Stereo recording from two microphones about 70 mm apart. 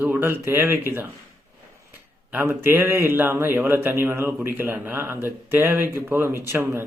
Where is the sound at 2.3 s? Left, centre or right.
Right.